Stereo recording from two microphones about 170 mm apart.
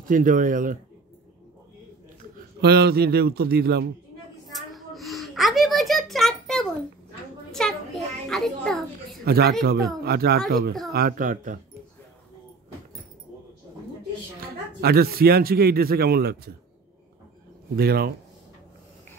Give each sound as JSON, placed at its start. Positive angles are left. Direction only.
{"t": 0.0, "sound": "speech", "side_deg": -50}
{"t": 2.6, "sound": "speech", "side_deg": -70}
{"t": 4.6, "sound": "a sound", "side_deg": 0}
{"t": 9.2, "sound": "speech", "side_deg": -70}
{"t": 14.4, "sound": "speech", "side_deg": -65}
{"t": 17.7, "sound": "speech", "side_deg": -65}